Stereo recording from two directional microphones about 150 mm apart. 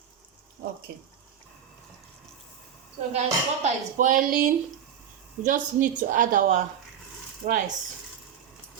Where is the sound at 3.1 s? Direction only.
50° right (ahead or behind).